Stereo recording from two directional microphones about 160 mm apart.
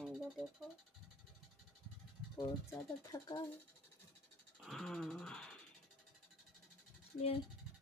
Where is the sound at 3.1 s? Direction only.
30° left (ahead or behind).